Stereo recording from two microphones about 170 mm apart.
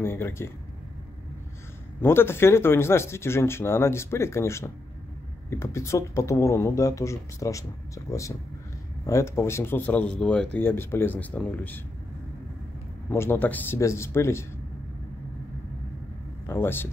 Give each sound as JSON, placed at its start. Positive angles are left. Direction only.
{"t": 0.0, "sound": "speech", "side_deg": 15}
{"t": 2.0, "sound": "speech", "side_deg": 15}
{"t": 13.1, "sound": "speech", "side_deg": 15}
{"t": 16.4, "sound": "speech", "side_deg": 15}